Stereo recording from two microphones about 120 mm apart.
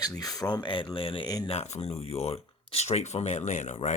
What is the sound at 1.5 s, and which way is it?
Speech, 60° left (ahead or behind).